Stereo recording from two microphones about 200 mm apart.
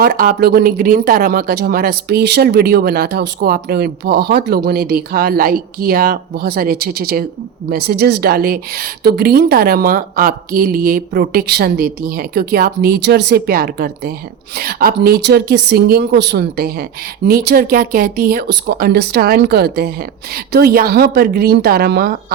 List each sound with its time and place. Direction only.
0.0 s speech: 50° right (ahead or behind)